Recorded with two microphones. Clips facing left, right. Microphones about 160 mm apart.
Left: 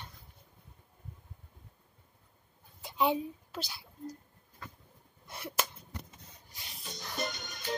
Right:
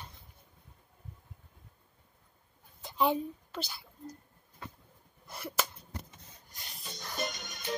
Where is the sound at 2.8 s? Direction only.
Centre (ahead or behind).